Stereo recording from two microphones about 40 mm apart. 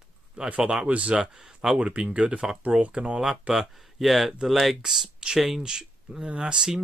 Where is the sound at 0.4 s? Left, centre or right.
Right.